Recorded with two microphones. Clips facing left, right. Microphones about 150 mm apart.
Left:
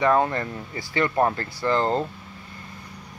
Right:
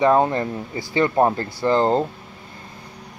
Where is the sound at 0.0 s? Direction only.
25° right (ahead or behind).